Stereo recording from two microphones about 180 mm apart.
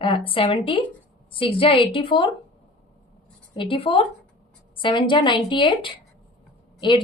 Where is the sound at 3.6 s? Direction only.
30° left (ahead or behind).